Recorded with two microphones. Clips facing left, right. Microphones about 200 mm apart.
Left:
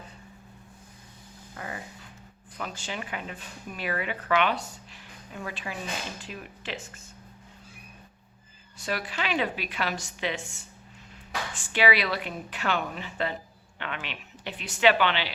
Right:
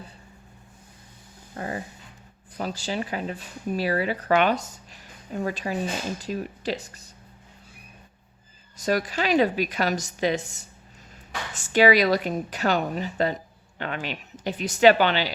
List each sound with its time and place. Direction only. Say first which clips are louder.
1.5 s speech: right 7 dB; 35° right (ahead or behind)
8.8 s speech: right 7 dB; 40° right (ahead or behind)